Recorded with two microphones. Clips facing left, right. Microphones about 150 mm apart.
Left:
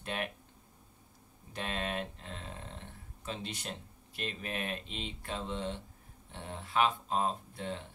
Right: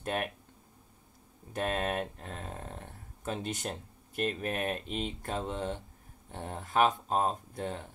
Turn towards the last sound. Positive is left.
turn(degrees=-45)  # may be behind; listen again after turning